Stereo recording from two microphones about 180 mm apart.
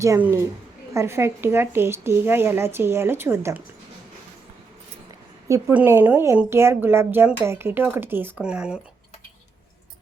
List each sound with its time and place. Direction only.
0.0 s a woman's voice: 15° right (ahead or behind)
5.5 s a woman's voice: 10° right (ahead or behind)